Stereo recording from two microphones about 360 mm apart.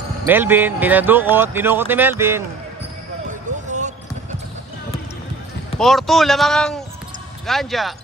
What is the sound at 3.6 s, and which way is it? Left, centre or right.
Basketball bounce, centre.